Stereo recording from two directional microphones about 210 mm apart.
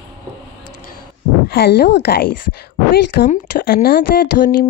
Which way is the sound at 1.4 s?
50° left (ahead or behind).